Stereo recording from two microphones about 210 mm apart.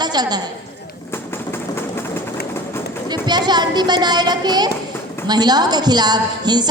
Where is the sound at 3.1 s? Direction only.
20° right (ahead or behind).